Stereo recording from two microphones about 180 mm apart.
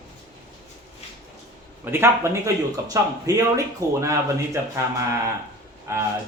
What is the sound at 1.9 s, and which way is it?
Speech, 15° right (ahead or behind).